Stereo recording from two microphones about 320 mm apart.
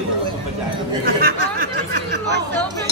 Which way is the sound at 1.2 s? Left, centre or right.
Right.